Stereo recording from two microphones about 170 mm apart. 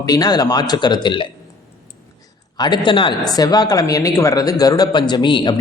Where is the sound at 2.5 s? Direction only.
25° left (ahead or behind).